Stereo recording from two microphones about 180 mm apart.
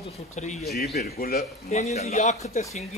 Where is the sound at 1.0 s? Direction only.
55° left (ahead or behind).